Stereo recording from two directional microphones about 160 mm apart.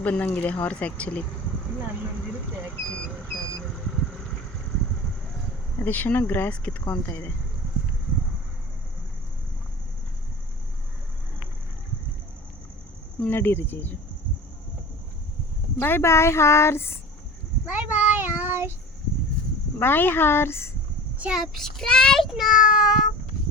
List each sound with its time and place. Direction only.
0.0 s speech: 10° left (ahead or behind)
2.9 s vehicle: 5° left (ahead or behind)
5.8 s speech: 10° left (ahead or behind)
13.1 s speech: 10° left (ahead or behind)
15.8 s speech: 15° left (ahead or behind)
17.7 s child singing: 10° right (ahead or behind)
19.8 s speech: 15° left (ahead or behind)
21.2 s a child's voice: 5° right (ahead or behind)